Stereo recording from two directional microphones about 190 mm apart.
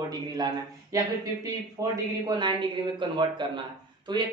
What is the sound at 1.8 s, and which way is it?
Speech, 15° right (ahead or behind).